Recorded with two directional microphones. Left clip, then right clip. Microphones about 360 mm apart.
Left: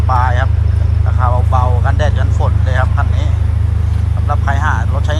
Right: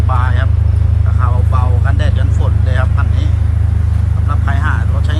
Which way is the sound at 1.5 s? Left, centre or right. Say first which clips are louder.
Left 5 dB; centre.